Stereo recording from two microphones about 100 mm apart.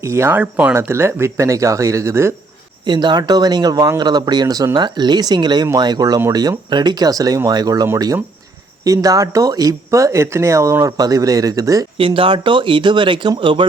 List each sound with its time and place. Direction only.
0.0 s speech: 25° right (ahead or behind)
2.8 s speech: 50° right (ahead or behind)
11.9 s speech: 60° right (ahead or behind)